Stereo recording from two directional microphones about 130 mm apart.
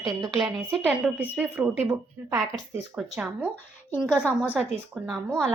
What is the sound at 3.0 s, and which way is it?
A woman's voice, 5° right (ahead or behind).